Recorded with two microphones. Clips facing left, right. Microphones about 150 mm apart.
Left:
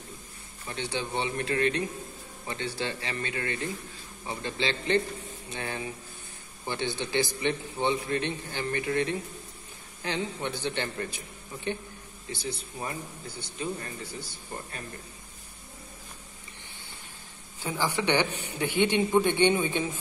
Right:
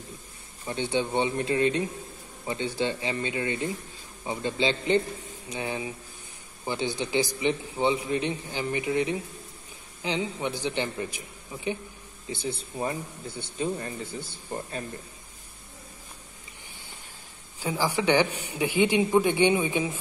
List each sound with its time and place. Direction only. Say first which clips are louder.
0.7 s a man's voice: right 6 dB; 20° right (ahead or behind)
12.3 s a man's voice: right 3 dB; 25° right (ahead or behind)
17.6 s a man's voice: right 2 dB; 10° right (ahead or behind)